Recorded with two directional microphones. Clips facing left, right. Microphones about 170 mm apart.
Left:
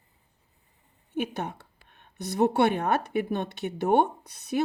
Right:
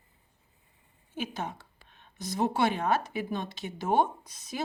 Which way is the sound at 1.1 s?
60° left (ahead or behind).